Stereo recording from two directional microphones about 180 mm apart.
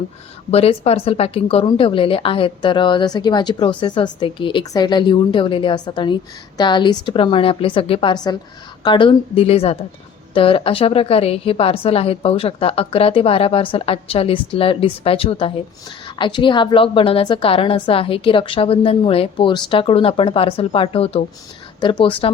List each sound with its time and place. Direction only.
0.5 s a woman's voice: 35° left (ahead or behind)